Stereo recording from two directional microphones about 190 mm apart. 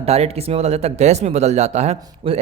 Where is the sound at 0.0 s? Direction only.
35° right (ahead or behind).